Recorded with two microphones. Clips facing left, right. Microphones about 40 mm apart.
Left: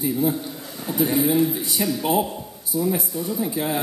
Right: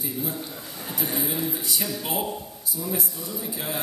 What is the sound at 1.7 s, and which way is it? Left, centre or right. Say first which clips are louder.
A man's voice: left 10 dB; left.